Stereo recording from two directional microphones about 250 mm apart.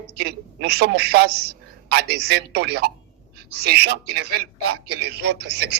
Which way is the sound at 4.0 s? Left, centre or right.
Right.